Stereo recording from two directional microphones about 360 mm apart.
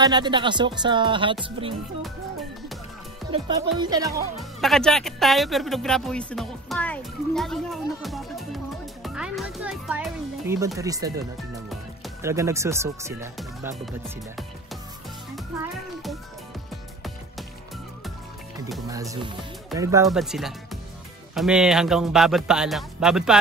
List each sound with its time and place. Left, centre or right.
0.0 s speech: centre
3.3 s speech: centre
9.0 s music: centre
11.7 s speech: centre
15.3 s music: centre
18.6 s speech: centre